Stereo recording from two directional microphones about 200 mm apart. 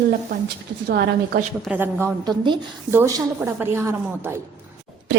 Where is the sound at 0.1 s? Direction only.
55° right (ahead or behind).